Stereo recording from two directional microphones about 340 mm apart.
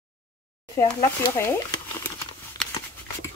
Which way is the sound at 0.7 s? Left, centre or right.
Centre.